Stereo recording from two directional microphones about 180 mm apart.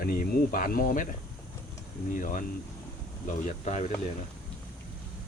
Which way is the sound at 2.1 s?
45° left (ahead or behind).